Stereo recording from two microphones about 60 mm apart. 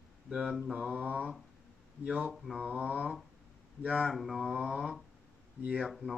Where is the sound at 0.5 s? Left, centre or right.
Centre.